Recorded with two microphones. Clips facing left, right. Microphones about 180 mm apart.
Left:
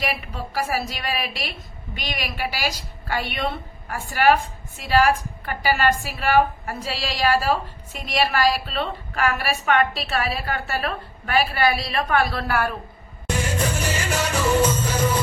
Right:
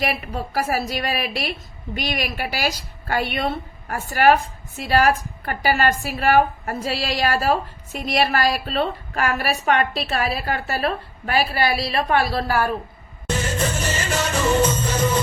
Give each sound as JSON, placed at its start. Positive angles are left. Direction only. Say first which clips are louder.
{"t": 0.0, "sound": "a woman's voice", "louder": "right 3 dB", "side_deg": -45}
{"t": 13.2, "sound": "music", "louder": "right 1 dB", "side_deg": 10}